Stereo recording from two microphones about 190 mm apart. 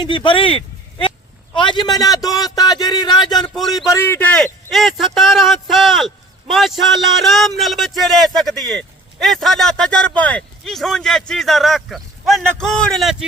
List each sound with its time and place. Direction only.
0.0 s a man's voice: 25° left (ahead or behind)
3.3 s speech: centre (ahead or behind)
3.9 s speech: 10° left (ahead or behind)